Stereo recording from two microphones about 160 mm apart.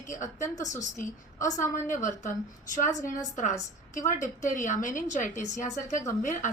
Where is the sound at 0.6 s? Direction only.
20° left (ahead or behind).